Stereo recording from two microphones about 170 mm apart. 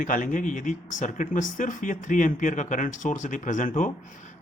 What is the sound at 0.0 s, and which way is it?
Speech, 50° left (ahead or behind).